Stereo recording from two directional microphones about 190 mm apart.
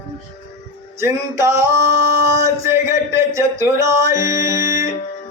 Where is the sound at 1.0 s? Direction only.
15° right (ahead or behind).